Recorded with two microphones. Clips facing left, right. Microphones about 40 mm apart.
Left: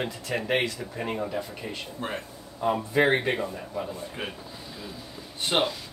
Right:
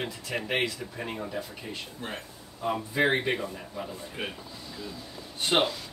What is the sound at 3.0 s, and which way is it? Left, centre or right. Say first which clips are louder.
Speech: left 2 dB; centre.